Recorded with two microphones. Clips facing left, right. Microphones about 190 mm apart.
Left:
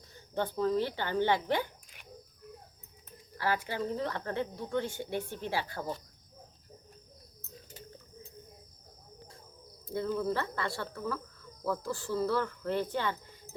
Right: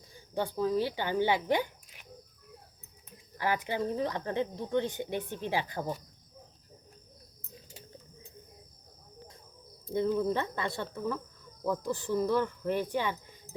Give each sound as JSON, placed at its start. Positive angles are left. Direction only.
{"t": 0.1, "sound": "speech", "side_deg": -10}
{"t": 3.3, "sound": "speech", "side_deg": -15}
{"t": 10.2, "sound": "speech", "side_deg": -20}